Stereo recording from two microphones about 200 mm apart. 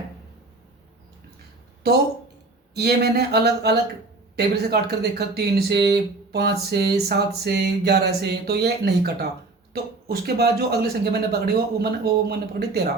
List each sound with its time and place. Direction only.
2.7 s a man's voice: 55° right (ahead or behind)
10.1 s a man's voice: 50° right (ahead or behind)